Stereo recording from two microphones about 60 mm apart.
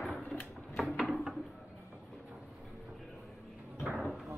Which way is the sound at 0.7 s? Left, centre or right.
Centre.